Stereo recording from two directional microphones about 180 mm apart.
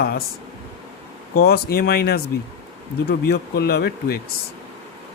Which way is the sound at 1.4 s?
60° left (ahead or behind).